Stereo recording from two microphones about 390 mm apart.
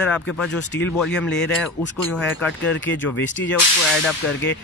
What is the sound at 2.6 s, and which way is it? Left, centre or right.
Speech, left.